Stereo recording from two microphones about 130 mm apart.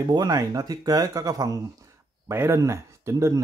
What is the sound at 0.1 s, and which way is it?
Speech, 30° right (ahead or behind).